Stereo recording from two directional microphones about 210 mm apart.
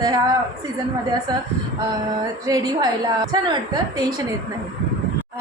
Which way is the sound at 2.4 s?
15° right (ahead or behind).